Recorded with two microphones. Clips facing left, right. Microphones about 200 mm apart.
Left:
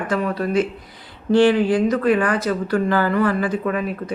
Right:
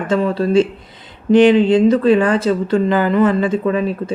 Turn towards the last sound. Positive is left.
turn(degrees=-25)  # may be behind; listen again after turning